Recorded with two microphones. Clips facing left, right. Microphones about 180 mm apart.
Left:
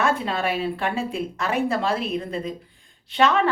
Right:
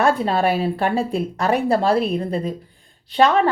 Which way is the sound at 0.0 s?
35° right (ahead or behind).